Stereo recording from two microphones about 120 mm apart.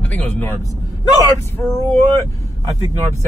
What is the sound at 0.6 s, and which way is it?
Speech, 25° left (ahead or behind).